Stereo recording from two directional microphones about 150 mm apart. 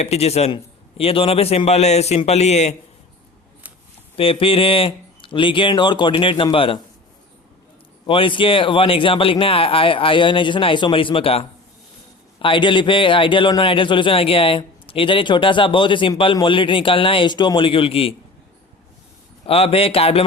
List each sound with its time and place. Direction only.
0.0 s a man's voice: 45° left (ahead or behind)
4.2 s a man's voice: 35° left (ahead or behind)
8.0 s a man's voice: 35° left (ahead or behind)
19.5 s a man's voice: 40° left (ahead or behind)